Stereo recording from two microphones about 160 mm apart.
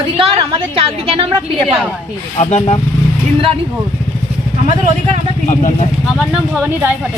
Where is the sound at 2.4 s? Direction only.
45° left (ahead or behind).